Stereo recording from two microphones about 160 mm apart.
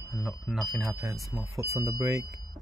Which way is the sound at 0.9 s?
15° right (ahead or behind).